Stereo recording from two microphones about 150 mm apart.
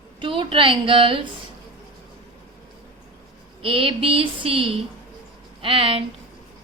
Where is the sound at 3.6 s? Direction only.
35° right (ahead or behind).